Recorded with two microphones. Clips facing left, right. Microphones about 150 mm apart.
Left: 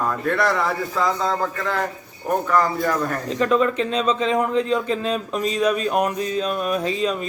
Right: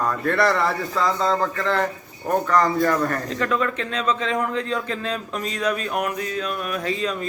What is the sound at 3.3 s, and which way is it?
Speech, 20° left (ahead or behind).